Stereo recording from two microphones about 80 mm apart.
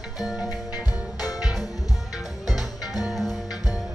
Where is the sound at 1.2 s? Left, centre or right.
Left.